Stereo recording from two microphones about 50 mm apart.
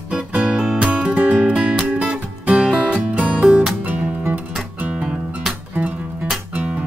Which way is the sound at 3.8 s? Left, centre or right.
Right.